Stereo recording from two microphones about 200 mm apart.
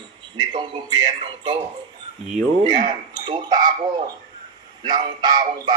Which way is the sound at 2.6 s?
20° right (ahead or behind).